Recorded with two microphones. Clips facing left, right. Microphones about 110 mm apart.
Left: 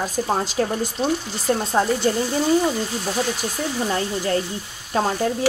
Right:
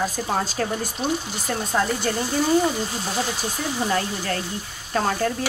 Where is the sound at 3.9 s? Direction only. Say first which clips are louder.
Left 3 dB; 25° left (ahead or behind).